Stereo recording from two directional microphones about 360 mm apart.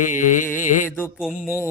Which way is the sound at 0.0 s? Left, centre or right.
Left.